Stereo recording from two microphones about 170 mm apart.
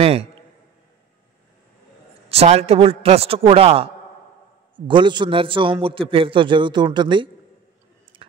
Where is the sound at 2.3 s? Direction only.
35° right (ahead or behind).